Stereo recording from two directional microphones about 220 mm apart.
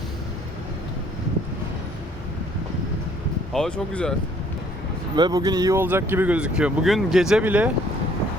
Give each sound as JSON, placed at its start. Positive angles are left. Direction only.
{"t": 3.5, "sound": "speech", "side_deg": 5}
{"t": 5.1, "sound": "speech", "side_deg": -20}